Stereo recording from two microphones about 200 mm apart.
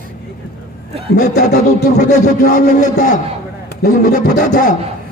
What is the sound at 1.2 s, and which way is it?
A man's voice, 35° left (ahead or behind).